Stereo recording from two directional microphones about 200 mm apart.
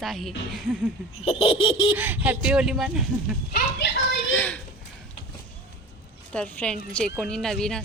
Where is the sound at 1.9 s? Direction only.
10° right (ahead or behind).